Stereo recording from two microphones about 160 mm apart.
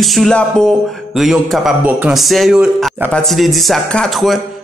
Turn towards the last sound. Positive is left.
turn(degrees=0)  # may be behind; listen again after turning